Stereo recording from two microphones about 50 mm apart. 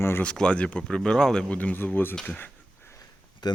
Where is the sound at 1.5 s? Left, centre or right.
Left.